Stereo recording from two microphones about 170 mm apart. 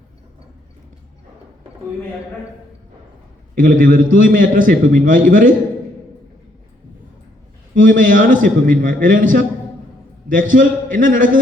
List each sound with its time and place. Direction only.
3.5 s a man's voice: 55° right (ahead or behind)
7.8 s a man's voice: 50° right (ahead or behind)